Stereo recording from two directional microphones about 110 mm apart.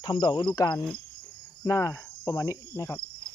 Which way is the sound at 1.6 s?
25° left (ahead or behind).